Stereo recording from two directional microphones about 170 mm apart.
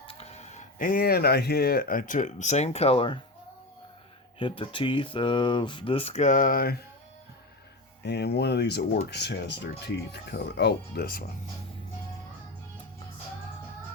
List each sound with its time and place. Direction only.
0.1 s speech: 35° left (ahead or behind)
4.4 s speech: 30° left (ahead or behind); by 6.7 s 60° left (ahead or behind)
8.0 s speech: 80° left; by 11.3 s 60° left (ahead or behind)